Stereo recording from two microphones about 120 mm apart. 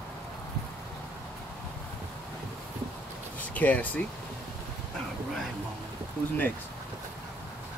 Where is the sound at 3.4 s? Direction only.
15° left (ahead or behind).